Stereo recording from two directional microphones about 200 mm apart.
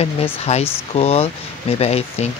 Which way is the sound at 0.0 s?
30° left (ahead or behind).